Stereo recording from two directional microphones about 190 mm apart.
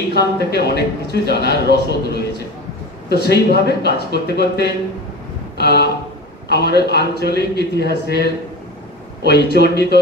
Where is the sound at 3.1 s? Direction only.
60° left (ahead or behind).